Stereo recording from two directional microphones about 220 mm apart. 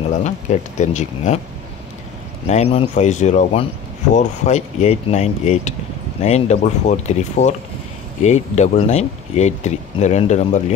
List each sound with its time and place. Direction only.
0.1 s speech: 35° left (ahead or behind)
2.4 s speech: 30° left (ahead or behind)